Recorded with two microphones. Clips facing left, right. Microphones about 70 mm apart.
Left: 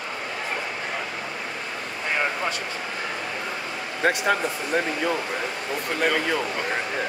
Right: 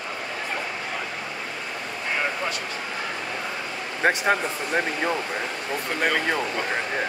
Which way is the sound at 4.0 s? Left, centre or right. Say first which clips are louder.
Right 1 dB; right.